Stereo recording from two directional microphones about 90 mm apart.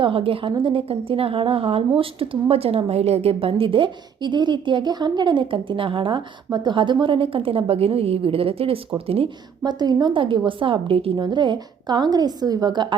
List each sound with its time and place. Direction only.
0.0 s a woman's voice: 90° right
9.6 s speech: 50° right (ahead or behind); by 11.2 s 85° right
11.2 s a woman's voice: 60° right (ahead or behind)